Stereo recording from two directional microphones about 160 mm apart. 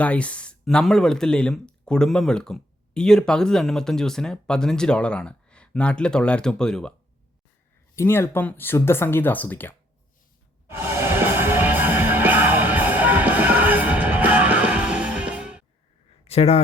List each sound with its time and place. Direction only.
0.0 s speech: 10° left (ahead or behind)
7.9 s speech: 15° left (ahead or behind)
10.7 s music: 15° right (ahead or behind)
16.2 s a sound: 40° left (ahead or behind)